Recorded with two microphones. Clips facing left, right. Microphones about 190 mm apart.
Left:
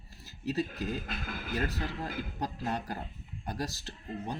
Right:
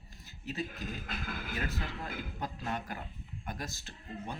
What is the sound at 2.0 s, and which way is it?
Speech, 35° left (ahead or behind).